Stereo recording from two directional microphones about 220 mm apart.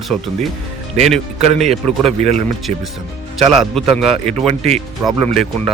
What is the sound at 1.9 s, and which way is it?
Speech, 30° right (ahead or behind).